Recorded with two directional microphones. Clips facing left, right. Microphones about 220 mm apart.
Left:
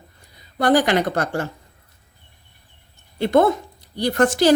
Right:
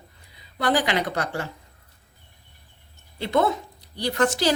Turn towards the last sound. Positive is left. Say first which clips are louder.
# left 5 dB
turn(degrees=50)  # may be behind; listen again after turning